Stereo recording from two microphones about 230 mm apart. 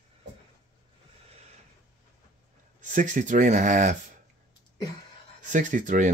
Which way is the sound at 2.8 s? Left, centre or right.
Right.